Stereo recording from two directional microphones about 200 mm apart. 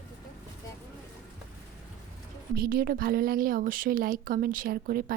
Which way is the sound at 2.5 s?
50° right (ahead or behind).